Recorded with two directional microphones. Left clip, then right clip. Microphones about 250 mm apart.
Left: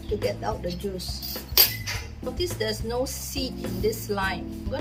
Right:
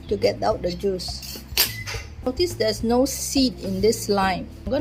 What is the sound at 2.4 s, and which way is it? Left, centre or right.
Speech, right.